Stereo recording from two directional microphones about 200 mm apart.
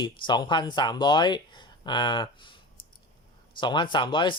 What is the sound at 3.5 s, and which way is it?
Speech, 25° left (ahead or behind).